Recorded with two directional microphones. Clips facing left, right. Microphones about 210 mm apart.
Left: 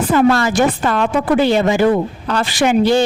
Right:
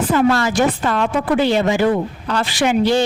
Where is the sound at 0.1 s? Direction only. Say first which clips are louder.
Left 3 dB; 50° left (ahead or behind).